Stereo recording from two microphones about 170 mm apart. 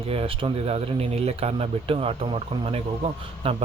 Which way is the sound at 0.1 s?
35° right (ahead or behind).